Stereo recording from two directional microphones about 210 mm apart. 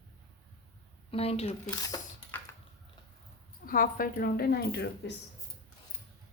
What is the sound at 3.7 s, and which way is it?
A woman's voice, 40° left (ahead or behind).